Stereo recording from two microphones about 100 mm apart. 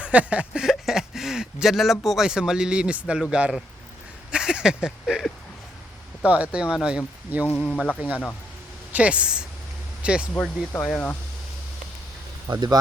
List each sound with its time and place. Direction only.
0.0 s speech: 15° right (ahead or behind)
4.3 s a sound: 10° right (ahead or behind)
6.2 s speech: 15° right (ahead or behind)
7.7 s speech: 10° left (ahead or behind)
8.9 s speech: 15° right (ahead or behind)
10.4 s speech: 15° left (ahead or behind)
12.5 s speech: 40° right (ahead or behind)